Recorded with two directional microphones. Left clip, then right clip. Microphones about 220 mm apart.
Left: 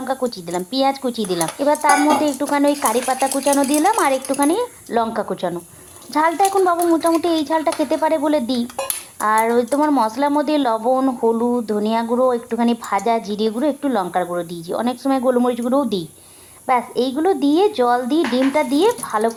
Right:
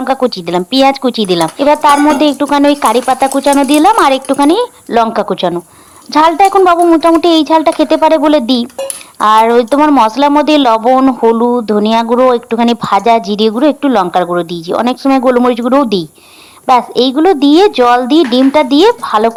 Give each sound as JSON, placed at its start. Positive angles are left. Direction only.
{"t": 0.0, "sound": "speech", "side_deg": -30}